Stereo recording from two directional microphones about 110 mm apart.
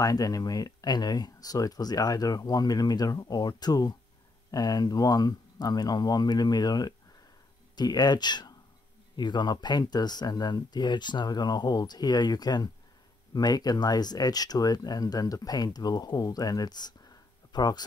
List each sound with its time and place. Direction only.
0.0 s speech: 35° left (ahead or behind)